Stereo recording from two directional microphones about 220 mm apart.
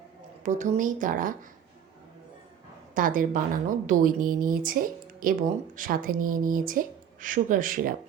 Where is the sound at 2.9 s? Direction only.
40° right (ahead or behind).